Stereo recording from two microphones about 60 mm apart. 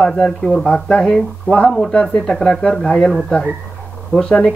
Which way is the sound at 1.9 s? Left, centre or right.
Centre.